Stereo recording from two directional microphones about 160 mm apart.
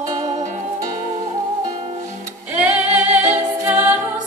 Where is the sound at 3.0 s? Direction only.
45° right (ahead or behind).